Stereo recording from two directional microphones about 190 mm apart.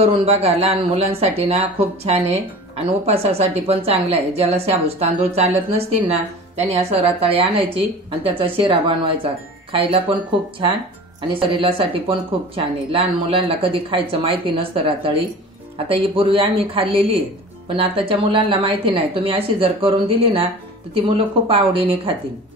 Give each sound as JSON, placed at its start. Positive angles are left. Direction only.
{"t": 0.0, "sound": "a woman's voice", "side_deg": -30}
{"t": 2.8, "sound": "a woman's voice", "side_deg": -30}
{"t": 11.3, "sound": "speech", "side_deg": -25}
{"t": 21.5, "sound": "a woman's voice", "side_deg": -30}